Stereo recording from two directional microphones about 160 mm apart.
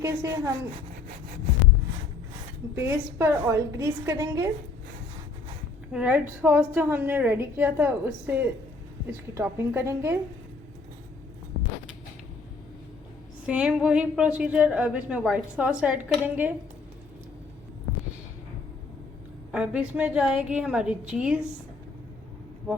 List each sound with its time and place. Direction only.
0.0 s a woman's voice: 20° right (ahead or behind)
2.7 s a woman's voice: 15° right (ahead or behind)
5.9 s a woman's voice: 10° right (ahead or behind)
13.5 s a woman's voice: 5° right (ahead or behind)
19.5 s a woman's voice: 5° right (ahead or behind)